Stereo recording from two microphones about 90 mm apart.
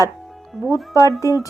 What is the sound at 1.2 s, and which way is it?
Speech, 40° left (ahead or behind).